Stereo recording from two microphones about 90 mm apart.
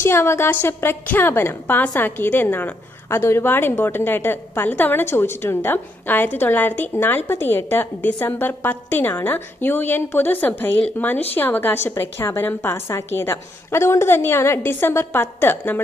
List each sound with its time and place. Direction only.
0.0 s a woman's voice: 30° left (ahead or behind)